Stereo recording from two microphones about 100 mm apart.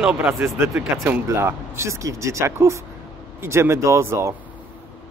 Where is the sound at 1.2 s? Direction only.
25° right (ahead or behind).